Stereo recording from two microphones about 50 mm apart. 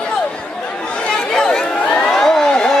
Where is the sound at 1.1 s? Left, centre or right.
Centre.